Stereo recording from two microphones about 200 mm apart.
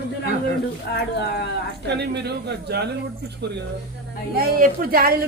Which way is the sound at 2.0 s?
55° right (ahead or behind).